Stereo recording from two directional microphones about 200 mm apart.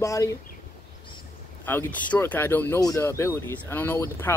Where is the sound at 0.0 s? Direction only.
15° left (ahead or behind).